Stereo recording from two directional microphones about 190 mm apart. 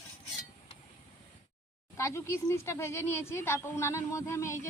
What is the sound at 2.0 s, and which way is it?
Speech, 15° left (ahead or behind).